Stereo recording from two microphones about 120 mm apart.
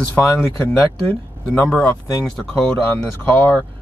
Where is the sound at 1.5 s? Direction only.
10° left (ahead or behind).